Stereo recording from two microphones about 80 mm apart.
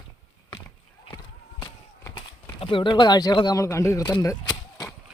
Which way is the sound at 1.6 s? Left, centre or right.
Left.